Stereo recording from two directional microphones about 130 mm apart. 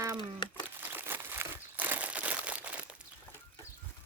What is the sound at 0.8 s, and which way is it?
Crumpling, 15° right (ahead or behind).